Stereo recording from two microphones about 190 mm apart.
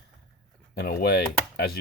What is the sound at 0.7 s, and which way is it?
Speech, 55° left (ahead or behind).